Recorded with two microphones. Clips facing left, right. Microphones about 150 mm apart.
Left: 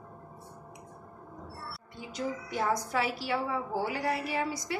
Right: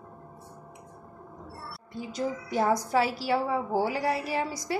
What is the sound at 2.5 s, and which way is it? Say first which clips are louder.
A woman's voice: right 6 dB; 40° right (ahead or behind).